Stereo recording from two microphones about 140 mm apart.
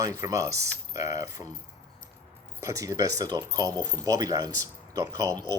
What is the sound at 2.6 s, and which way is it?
Speech, 25° right (ahead or behind).